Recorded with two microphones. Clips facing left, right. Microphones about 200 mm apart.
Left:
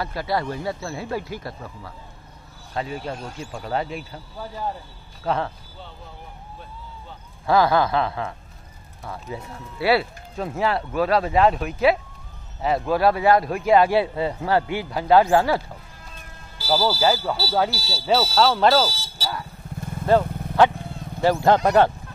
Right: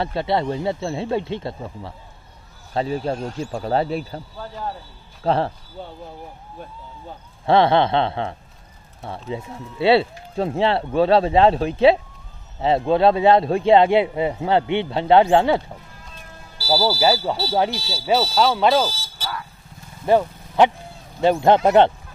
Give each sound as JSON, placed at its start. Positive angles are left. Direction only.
{"t": 0.0, "sound": "speech", "side_deg": -25}
{"t": 5.2, "sound": "speech", "side_deg": -30}
{"t": 7.4, "sound": "speech", "side_deg": -25}
{"t": 16.5, "sound": "speech", "side_deg": -10}
{"t": 18.5, "sound": "speech", "side_deg": 0}
{"t": 19.1, "sound": "vehicle", "side_deg": 35}
{"t": 21.2, "sound": "speech", "side_deg": -20}